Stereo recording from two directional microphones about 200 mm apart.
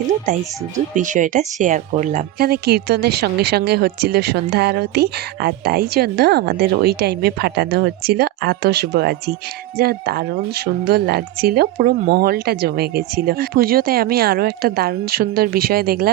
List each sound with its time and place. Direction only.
0.9 s speech: 40° right (ahead or behind)